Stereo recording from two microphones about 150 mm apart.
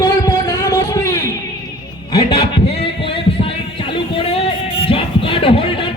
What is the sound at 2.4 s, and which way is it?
Heart murmur, 40° left (ahead or behind).